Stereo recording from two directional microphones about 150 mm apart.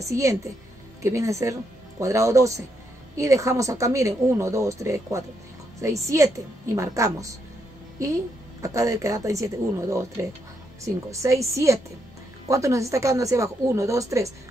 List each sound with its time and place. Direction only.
0.1 s a woman's voice: 20° right (ahead or behind)
11.1 s a woman's voice: 20° right (ahead or behind)